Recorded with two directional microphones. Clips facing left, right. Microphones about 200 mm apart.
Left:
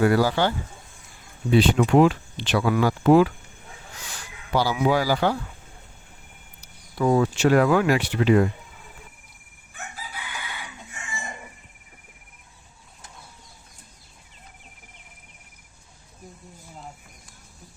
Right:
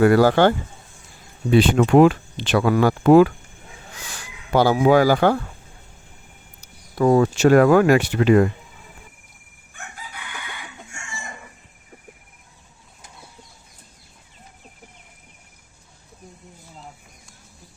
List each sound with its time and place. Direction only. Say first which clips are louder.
0.0 s speech: right 6 dB; 55° right (ahead or behind)
1.5 s speech: right 3 dB; 55° right (ahead or behind)
4.5 s speech: right 6 dB; 50° right (ahead or behind)
6.6 s speech: right 5 dB; 45° right (ahead or behind)